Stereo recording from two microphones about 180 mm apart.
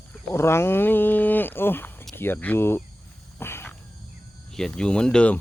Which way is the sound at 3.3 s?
10° left (ahead or behind).